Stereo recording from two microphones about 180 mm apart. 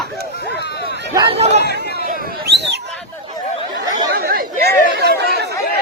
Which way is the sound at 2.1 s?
65° right (ahead or behind).